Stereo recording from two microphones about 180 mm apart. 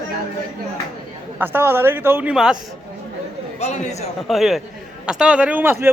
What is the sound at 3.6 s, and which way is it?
Speech, 40° left (ahead or behind).